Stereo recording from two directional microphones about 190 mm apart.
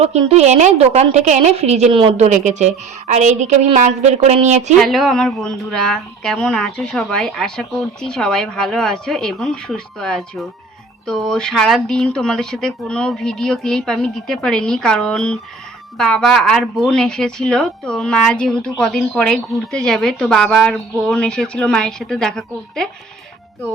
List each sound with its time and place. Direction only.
0.0 s a woman's voice: 35° right (ahead or behind)
4.8 s a woman's voice: centre (ahead or behind)